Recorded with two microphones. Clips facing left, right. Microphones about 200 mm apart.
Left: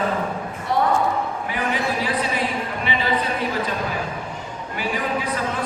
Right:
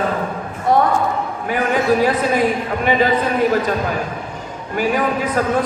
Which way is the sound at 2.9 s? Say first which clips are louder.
Right 11 dB; 45° right (ahead or behind).